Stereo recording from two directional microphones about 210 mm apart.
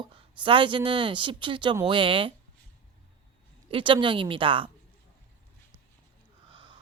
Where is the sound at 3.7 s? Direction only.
25° right (ahead or behind).